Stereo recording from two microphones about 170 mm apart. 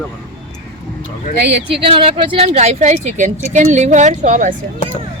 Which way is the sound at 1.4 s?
90° right.